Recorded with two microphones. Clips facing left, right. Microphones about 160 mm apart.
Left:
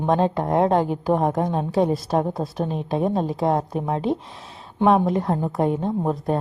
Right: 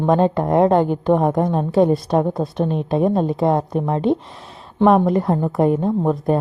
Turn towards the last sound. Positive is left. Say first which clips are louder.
# right 5 dB
turn(degrees=0)  # may be behind; listen again after turning